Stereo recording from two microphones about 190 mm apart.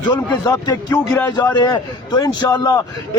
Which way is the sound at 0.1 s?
20° left (ahead or behind).